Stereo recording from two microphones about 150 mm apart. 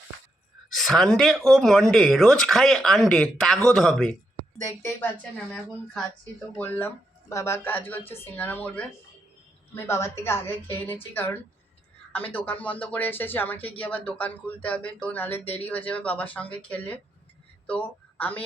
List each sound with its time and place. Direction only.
0.7 s speech: centre (ahead or behind)
4.6 s speech: 20° left (ahead or behind)
6.6 s a woman's voice: 15° left (ahead or behind)